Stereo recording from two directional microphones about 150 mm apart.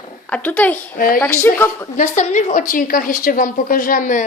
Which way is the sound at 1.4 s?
15° left (ahead or behind).